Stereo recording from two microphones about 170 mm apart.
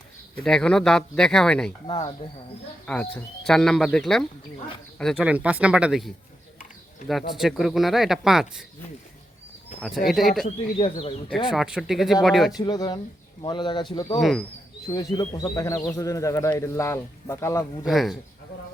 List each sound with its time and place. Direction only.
0.4 s speech: 5° left (ahead or behind)
1.9 s speech: 25° left (ahead or behind)
2.8 s speech: 10° left (ahead or behind)
5.2 s speech: 5° right (ahead or behind)
7.3 s speech: centre (ahead or behind)
10.1 s speech: centre (ahead or behind)
10.8 s speech: 35° left (ahead or behind)
11.5 s speech: 5° right (ahead or behind)
12.5 s speech: 25° left (ahead or behind)
14.2 s speech: centre (ahead or behind)
14.9 s speech: 15° left (ahead or behind)
17.8 s speech: centre (ahead or behind)